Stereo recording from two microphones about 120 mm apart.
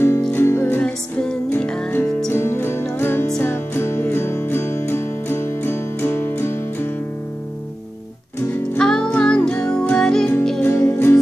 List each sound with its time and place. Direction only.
0.3 s music: 20° left (ahead or behind)
2.3 s music: 20° left (ahead or behind)
8.7 s music: 5° left (ahead or behind)
10.6 s music: 20° left (ahead or behind)